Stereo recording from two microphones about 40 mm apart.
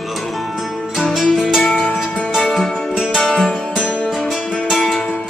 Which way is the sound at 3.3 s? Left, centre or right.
Centre.